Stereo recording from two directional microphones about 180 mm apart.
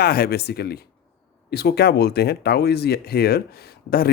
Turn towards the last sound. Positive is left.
turn(degrees=60)  # may be behind; listen again after turning